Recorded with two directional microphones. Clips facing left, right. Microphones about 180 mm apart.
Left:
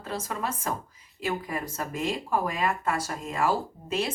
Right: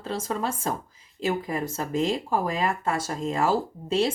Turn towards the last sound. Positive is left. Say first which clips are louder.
# right 5 dB
turn(degrees=-30)  # may be behind; listen again after turning